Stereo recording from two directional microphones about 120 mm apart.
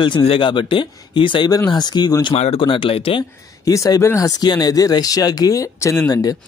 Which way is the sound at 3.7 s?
30° left (ahead or behind).